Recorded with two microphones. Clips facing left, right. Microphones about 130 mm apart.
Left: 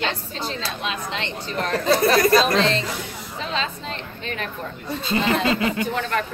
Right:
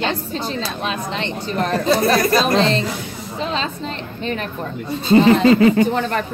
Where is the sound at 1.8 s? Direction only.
15° right (ahead or behind).